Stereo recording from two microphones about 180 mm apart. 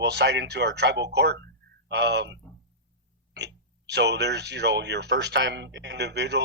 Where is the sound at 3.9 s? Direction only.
70° right (ahead or behind).